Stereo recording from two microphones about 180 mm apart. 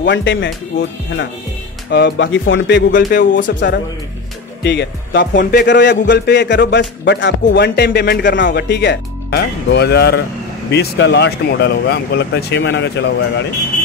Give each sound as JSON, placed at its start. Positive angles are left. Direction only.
{"t": 0.0, "sound": "speech", "side_deg": 80}
{"t": 1.9, "sound": "a man's voice", "side_deg": 65}
{"t": 2.9, "sound": "speech", "side_deg": 50}
{"t": 3.3, "sound": "speech", "side_deg": 90}
{"t": 5.3, "sound": "speech", "side_deg": 50}
{"t": 5.7, "sound": "a man's voice", "side_deg": 75}